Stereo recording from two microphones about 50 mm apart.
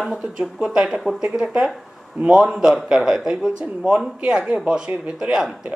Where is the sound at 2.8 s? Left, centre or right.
Centre.